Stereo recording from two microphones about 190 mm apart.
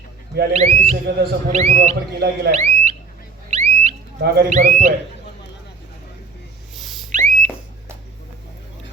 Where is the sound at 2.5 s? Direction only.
35° right (ahead or behind).